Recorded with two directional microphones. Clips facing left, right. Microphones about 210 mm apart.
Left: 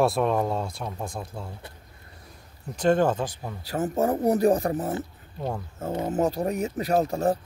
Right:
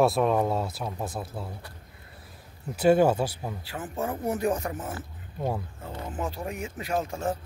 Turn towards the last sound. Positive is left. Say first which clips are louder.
# left 6 dB
turn(degrees=40)  # may be behind; listen again after turning